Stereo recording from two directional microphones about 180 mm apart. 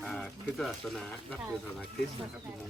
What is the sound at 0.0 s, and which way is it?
Speech, centre (ahead or behind).